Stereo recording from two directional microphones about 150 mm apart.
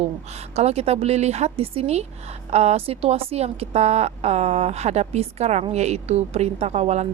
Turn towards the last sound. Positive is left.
turn(degrees=-50)  # may be behind; listen again after turning